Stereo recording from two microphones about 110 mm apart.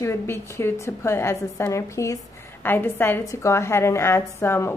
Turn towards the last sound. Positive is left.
turn(degrees=20)  # may be behind; listen again after turning